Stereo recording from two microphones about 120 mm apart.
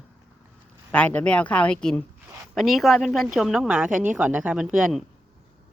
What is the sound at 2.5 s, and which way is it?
Speech, centre (ahead or behind).